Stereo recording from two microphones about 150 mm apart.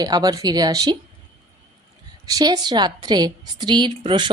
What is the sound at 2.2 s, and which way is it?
A woman's voice, 25° right (ahead or behind).